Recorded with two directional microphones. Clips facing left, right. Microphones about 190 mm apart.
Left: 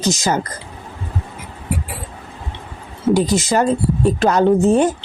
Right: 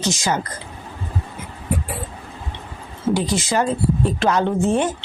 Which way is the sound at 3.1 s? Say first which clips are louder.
Left 5 dB; 40° left (ahead or behind).